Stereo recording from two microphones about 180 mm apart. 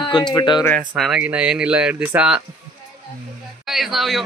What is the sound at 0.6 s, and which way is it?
Speech, centre (ahead or behind).